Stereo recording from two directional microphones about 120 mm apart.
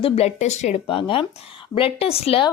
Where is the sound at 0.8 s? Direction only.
45° left (ahead or behind).